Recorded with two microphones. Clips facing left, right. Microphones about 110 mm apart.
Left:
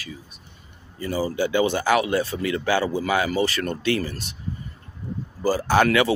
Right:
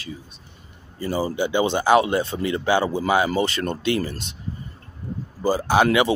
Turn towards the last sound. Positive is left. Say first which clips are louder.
# right 1 dB
turn(degrees=-20)  # may be behind; listen again after turning